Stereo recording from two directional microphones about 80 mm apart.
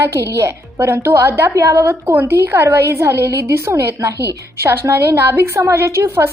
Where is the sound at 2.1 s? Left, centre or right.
Right.